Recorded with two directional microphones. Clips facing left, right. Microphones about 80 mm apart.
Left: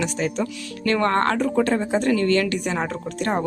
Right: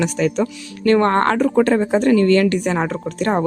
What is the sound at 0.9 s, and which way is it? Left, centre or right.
A woman's voice, right.